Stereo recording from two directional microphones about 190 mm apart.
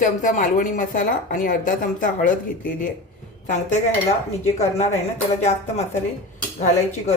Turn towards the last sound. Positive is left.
turn(degrees=35)  # may be behind; listen again after turning